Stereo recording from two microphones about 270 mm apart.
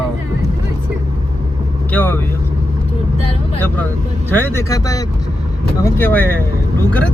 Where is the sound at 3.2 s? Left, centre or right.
Centre.